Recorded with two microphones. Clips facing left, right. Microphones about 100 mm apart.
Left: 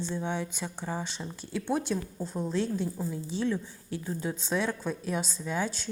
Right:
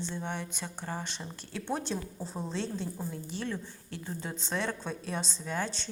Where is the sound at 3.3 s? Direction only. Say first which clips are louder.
Left 9 dB; 15° left (ahead or behind).